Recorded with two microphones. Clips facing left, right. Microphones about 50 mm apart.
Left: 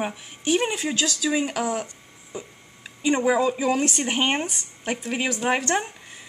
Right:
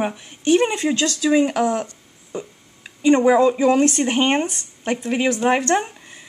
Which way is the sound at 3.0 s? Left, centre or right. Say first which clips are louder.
Right 7 dB; centre.